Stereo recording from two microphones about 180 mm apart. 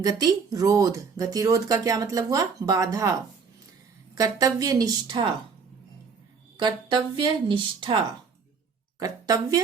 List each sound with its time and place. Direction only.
0.0 s speech: 20° right (ahead or behind)
6.6 s speech: 25° right (ahead or behind)
9.0 s a woman's voice: 20° right (ahead or behind)